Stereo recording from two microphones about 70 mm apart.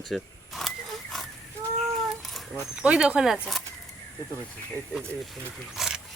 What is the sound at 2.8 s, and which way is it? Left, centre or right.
Speech, centre.